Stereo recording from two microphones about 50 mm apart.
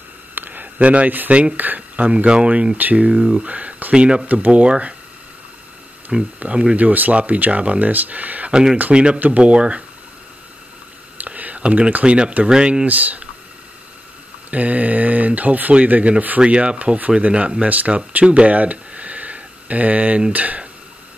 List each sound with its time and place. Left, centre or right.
0.3 s a sound: right
1.3 s speech: right
3.1 s speech: centre
3.4 s speech: right
6.1 s speech: centre
6.8 s speech: right
8.5 s speech: centre
11.1 s a sound: right
11.9 s speech: right
12.8 s speech: right
14.5 s speech: right